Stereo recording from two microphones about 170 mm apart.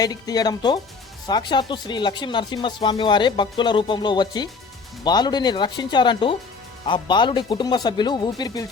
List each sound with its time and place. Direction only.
0.0 s speech: 20° left (ahead or behind)